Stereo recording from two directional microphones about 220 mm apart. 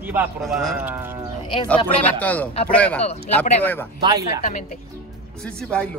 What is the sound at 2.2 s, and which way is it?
Speech, 5° left (ahead or behind).